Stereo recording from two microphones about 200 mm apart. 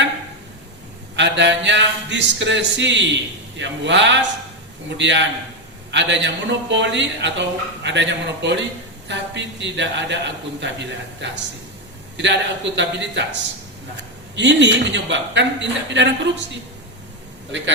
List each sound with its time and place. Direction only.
1.1 s a man's voice: 60° right (ahead or behind)